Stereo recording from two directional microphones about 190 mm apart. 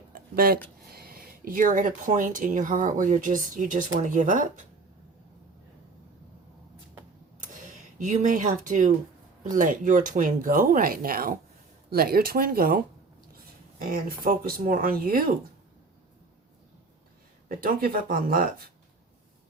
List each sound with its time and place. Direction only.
0.1 s a sound: 50° right (ahead or behind)
0.9 s speech: 55° right (ahead or behind)
7.4 s speech: 40° right (ahead or behind)
17.5 s speech: 50° right (ahead or behind)